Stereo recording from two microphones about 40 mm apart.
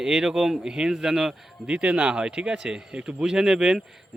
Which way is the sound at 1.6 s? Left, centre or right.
Right.